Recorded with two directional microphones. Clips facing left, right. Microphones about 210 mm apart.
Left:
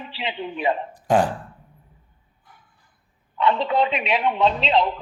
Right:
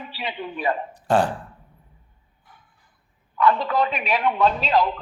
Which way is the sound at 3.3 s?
25° left (ahead or behind).